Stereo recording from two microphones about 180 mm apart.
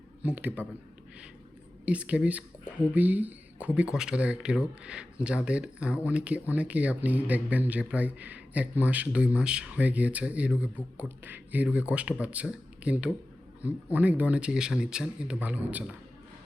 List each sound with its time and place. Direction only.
0.2 s speech: 10° right (ahead or behind)
1.8 s speech: 5° right (ahead or behind)